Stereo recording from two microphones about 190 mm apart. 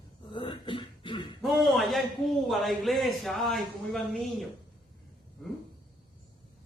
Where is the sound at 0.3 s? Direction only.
25° left (ahead or behind).